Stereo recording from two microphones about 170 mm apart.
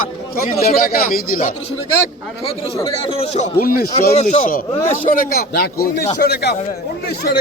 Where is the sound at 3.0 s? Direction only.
35° left (ahead or behind).